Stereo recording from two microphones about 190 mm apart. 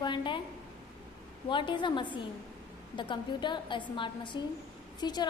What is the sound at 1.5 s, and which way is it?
A woman's voice, 25° left (ahead or behind).